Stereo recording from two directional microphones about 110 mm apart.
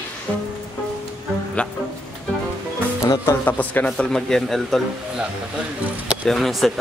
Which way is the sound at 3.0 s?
35° left (ahead or behind).